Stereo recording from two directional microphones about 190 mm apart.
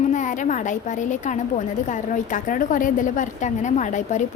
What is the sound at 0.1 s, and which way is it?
A woman's voice, 40° left (ahead or behind).